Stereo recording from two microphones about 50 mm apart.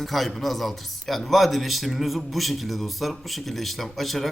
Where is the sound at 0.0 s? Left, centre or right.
Centre.